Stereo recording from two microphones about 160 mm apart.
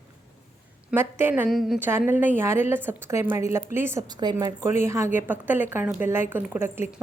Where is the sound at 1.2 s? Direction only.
10° right (ahead or behind).